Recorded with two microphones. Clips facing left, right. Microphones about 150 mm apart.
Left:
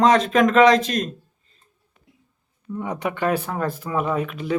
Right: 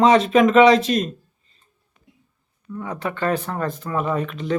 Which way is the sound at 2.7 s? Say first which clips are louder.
Left 1 dB; 20° left (ahead or behind).